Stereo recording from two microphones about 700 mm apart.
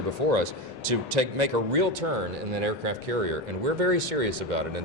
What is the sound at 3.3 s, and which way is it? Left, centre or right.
Speech, right.